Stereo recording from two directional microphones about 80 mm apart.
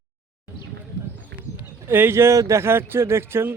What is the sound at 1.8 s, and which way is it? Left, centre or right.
Speech, right.